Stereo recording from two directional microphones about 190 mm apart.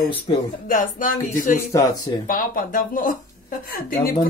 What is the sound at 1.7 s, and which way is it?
Speech, 20° left (ahead or behind).